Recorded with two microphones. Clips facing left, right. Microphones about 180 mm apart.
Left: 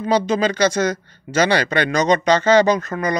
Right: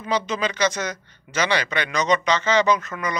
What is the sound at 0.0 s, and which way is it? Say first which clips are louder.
Speech: left 7 dB; 35° left (ahead or behind).